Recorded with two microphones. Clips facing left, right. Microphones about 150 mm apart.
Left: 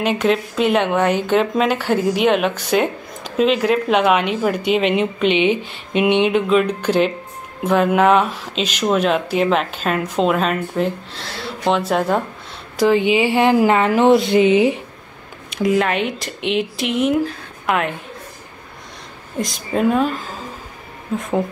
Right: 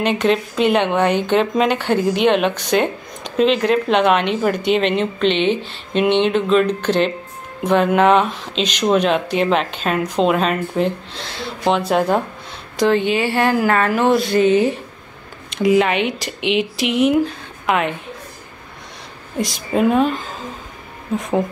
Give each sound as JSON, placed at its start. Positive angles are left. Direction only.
{"t": 0.0, "sound": "speech", "side_deg": 5}
{"t": 15.5, "sound": "a woman's voice", "side_deg": 0}
{"t": 19.3, "sound": "speech", "side_deg": 0}